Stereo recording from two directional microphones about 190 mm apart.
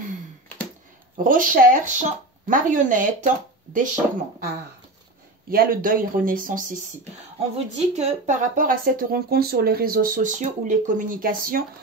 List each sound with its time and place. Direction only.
1.1 s speech: 45° right (ahead or behind)
5.5 s speech: 50° right (ahead or behind)